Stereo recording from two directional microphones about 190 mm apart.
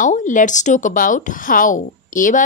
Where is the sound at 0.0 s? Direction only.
40° left (ahead or behind).